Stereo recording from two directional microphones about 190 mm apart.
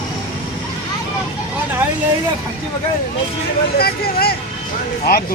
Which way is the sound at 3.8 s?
55° left (ahead or behind).